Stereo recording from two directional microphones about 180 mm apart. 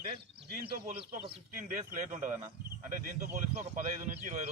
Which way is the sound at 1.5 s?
50° right (ahead or behind).